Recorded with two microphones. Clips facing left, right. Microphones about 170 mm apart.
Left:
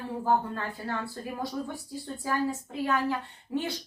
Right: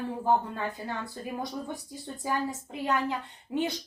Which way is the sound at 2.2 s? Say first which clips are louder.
Left 1 dB; 15° right (ahead or behind).